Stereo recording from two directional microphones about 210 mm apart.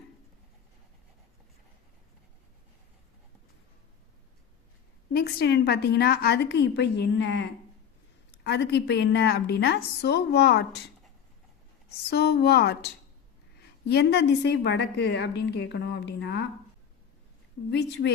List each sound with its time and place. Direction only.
5.1 s a woman's voice: 50° left (ahead or behind)
12.1 s a woman's voice: 50° left (ahead or behind)
17.7 s a woman's voice: 55° left (ahead or behind)